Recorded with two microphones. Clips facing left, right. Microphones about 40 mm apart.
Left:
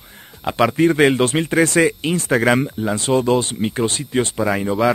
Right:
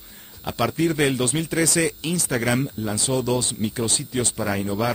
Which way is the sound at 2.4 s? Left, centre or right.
Left.